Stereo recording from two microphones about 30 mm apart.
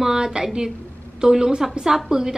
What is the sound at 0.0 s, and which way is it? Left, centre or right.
A woman's voice, centre.